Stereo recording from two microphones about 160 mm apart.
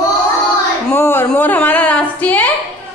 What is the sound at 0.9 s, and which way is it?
A woman's voice, 15° left (ahead or behind).